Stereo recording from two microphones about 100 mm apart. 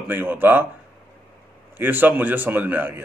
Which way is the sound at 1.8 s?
20° right (ahead or behind).